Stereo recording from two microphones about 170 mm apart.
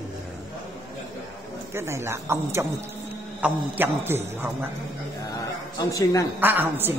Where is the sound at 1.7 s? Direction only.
15° right (ahead or behind).